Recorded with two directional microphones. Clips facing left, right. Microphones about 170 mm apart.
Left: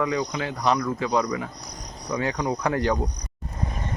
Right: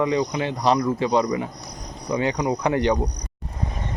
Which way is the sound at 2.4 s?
5° right (ahead or behind).